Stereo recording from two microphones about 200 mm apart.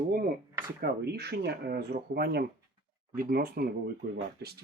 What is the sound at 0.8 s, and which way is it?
Speech, 50° right (ahead or behind).